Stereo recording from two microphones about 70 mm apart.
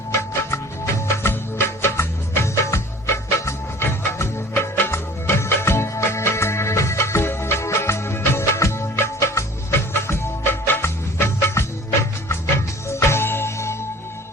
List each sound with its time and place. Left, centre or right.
0.2 s music: left